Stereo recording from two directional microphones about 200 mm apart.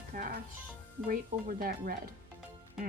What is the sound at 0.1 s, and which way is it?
Speech, 45° right (ahead or behind).